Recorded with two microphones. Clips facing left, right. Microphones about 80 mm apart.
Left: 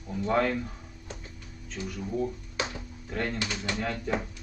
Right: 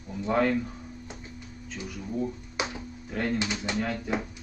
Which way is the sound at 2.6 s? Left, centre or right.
Centre.